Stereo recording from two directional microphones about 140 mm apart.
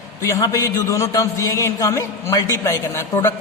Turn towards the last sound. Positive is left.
turn(degrees=20)  # may be behind; listen again after turning